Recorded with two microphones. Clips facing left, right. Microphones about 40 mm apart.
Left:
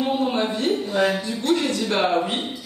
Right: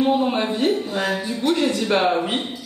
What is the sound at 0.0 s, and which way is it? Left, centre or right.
Speech, centre.